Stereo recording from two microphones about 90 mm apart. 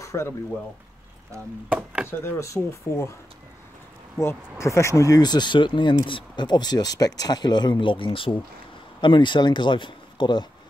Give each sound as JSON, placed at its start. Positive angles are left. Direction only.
{"t": 0.0, "sound": "frying", "side_deg": 35}
{"t": 1.7, "sound": "speech", "side_deg": -15}
{"t": 2.0, "sound": "speech", "side_deg": 30}
{"t": 4.2, "sound": "speech", "side_deg": 30}
{"t": 5.2, "sound": "speech", "side_deg": 55}
{"t": 7.8, "sound": "speech", "side_deg": 70}